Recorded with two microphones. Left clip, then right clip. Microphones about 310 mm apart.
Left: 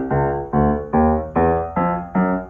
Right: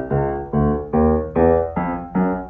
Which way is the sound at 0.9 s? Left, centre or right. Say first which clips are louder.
Right 1 dB; centre.